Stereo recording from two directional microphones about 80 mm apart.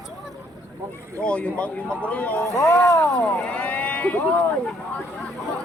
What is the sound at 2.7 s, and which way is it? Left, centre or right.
Speech, left.